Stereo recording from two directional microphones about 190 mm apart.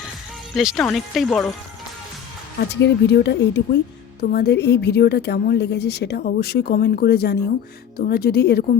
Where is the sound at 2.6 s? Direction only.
60° left (ahead or behind).